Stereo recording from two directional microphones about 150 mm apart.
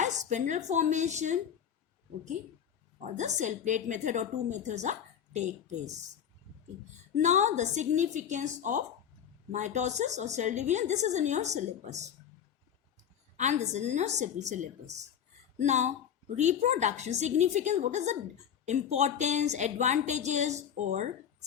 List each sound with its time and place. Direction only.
0.0 s a woman's voice: 55° right (ahead or behind)
3.0 s a woman's voice: 55° right (ahead or behind)
7.2 s a woman's voice: 50° right (ahead or behind)
13.3 s a woman's voice: 50° right (ahead or behind)